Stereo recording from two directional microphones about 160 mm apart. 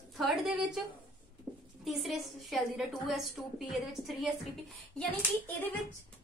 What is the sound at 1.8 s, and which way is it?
A woman's voice, centre (ahead or behind).